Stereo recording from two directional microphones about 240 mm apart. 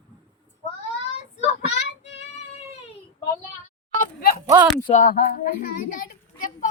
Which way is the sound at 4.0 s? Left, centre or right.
Left.